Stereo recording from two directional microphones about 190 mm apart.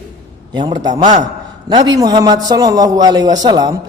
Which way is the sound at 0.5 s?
20° right (ahead or behind).